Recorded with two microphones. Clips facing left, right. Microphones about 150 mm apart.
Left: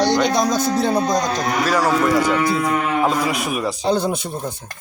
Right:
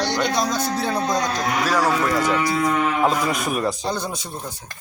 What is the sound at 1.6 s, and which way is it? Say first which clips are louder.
Speech: left 3 dB; centre (ahead or behind).